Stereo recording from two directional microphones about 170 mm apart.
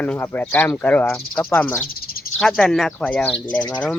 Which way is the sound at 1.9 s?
60° left (ahead or behind).